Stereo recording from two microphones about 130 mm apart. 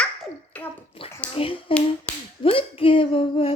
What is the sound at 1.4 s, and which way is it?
A woman's voice, 45° left (ahead or behind).